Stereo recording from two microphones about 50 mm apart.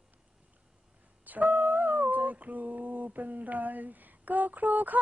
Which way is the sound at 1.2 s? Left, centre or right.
Right.